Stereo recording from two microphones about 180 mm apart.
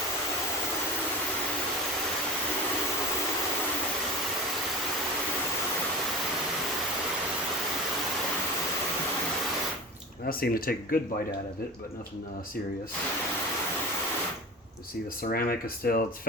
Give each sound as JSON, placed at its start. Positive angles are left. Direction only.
{"t": 10.2, "sound": "speech", "side_deg": 55}
{"t": 15.2, "sound": "speech", "side_deg": 55}